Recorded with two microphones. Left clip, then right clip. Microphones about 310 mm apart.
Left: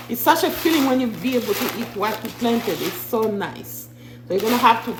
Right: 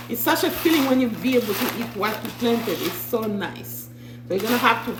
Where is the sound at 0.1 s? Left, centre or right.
Centre.